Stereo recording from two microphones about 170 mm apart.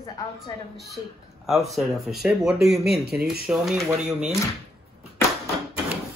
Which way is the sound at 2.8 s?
70° right (ahead or behind).